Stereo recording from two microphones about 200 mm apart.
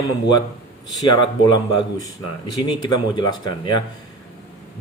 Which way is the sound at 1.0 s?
20° left (ahead or behind).